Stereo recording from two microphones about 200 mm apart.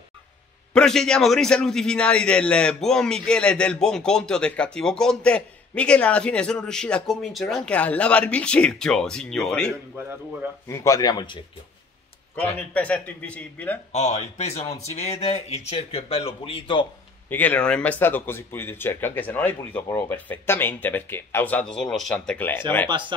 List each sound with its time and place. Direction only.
0.7 s a man's voice: 5° left (ahead or behind)
9.9 s speech: 10° right (ahead or behind)
10.7 s speech: 15° left (ahead or behind)
12.5 s speech: 5° left (ahead or behind)
13.9 s speech: 35° left (ahead or behind)
17.3 s speech: 10° left (ahead or behind)
22.8 s speech: 25° right (ahead or behind)